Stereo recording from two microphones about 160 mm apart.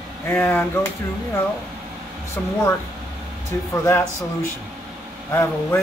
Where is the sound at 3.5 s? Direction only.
15° left (ahead or behind).